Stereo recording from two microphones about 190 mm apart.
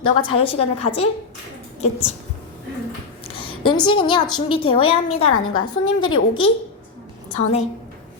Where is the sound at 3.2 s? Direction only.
30° left (ahead or behind).